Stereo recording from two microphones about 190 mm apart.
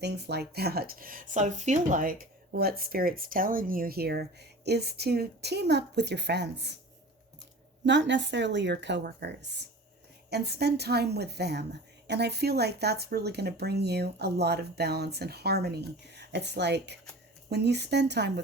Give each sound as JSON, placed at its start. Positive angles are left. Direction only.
{"t": 0.0, "sound": "speech", "side_deg": -60}
{"t": 7.9, "sound": "speech", "side_deg": -70}